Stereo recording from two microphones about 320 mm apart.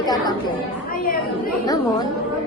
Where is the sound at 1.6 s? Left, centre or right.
Centre.